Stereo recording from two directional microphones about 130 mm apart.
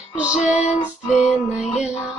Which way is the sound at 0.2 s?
10° right (ahead or behind).